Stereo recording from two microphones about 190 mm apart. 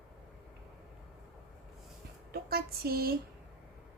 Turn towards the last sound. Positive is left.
turn(degrees=-55)  # may be behind; listen again after turning